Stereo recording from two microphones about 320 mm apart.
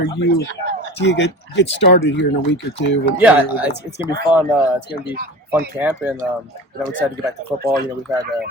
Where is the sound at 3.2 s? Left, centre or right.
Centre.